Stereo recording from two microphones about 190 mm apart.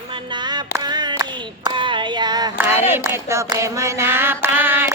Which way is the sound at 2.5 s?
10° right (ahead or behind).